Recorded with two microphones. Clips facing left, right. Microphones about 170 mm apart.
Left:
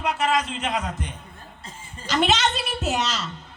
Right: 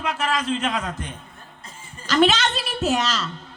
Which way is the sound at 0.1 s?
20° left (ahead or behind).